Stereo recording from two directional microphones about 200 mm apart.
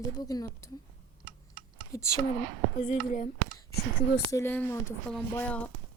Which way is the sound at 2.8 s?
40° left (ahead or behind).